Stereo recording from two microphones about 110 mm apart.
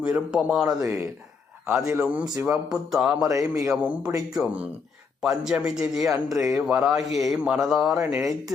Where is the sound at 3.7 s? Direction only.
10° right (ahead or behind).